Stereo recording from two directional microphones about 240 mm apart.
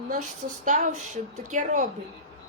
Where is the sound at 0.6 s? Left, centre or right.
Right.